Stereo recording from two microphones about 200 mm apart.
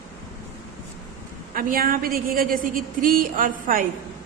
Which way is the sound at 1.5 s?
45° right (ahead or behind).